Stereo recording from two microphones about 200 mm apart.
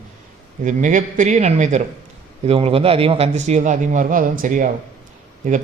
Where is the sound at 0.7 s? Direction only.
40° right (ahead or behind).